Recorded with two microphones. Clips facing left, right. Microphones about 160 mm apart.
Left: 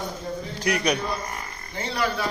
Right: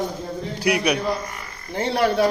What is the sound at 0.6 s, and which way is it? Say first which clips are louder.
Speech: right 3 dB; 10° right (ahead or behind).